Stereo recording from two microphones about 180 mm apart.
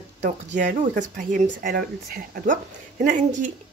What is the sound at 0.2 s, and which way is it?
A woman's voice, 45° right (ahead or behind).